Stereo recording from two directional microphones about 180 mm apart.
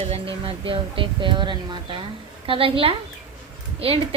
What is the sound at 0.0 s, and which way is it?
A woman's voice, 35° right (ahead or behind).